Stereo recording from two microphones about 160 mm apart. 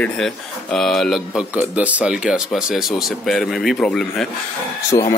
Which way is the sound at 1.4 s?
10° right (ahead or behind).